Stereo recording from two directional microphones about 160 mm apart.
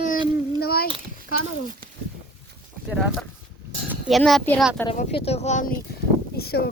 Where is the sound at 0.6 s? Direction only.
70° left (ahead or behind).